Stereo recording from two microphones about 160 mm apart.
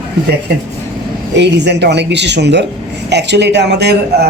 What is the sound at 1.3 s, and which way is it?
Speech, 90° right.